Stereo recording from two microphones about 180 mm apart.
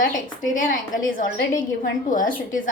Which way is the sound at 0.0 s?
45° left (ahead or behind).